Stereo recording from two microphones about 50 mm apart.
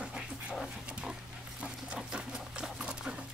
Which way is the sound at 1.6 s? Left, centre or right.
Centre.